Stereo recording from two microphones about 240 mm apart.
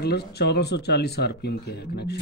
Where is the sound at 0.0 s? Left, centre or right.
Left.